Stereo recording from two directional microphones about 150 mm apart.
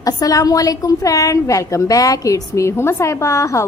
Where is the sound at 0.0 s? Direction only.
25° left (ahead or behind).